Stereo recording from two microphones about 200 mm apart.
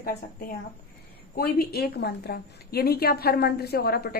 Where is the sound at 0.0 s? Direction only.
45° left (ahead or behind).